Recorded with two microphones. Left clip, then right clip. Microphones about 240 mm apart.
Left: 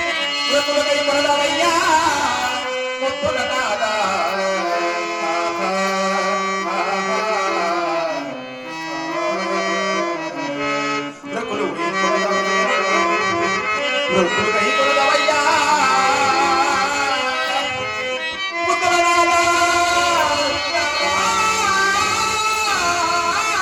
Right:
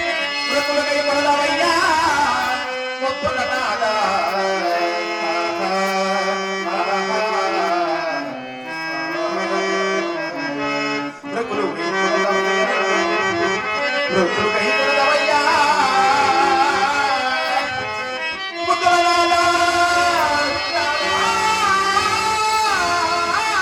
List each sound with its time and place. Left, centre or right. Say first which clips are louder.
0.5 s music: left 1 dB; left
11.9 s music: right 1 dB; centre
14.1 s music: left 2 dB; centre
18.9 s music: right 1 dB; left
22.8 s music: even; left